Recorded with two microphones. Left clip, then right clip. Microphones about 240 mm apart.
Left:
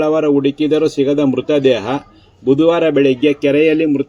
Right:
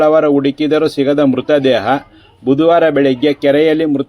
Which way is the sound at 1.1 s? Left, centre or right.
Right.